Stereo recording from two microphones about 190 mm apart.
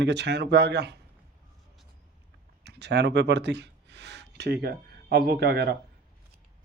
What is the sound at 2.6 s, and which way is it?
Speech, 60° right (ahead or behind).